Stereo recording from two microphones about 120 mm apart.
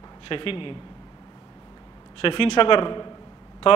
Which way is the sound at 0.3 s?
45° left (ahead or behind).